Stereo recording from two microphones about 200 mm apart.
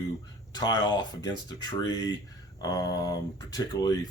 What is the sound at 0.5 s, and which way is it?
Speech, 20° left (ahead or behind).